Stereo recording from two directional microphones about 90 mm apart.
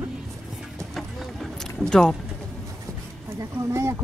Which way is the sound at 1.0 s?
5° left (ahead or behind).